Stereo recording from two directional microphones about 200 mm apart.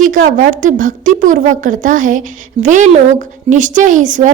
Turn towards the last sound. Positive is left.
turn(degrees=-40)  # may be behind; listen again after turning